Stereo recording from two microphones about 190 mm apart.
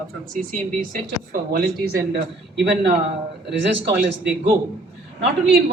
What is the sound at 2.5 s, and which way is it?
Speech, 65° right (ahead or behind).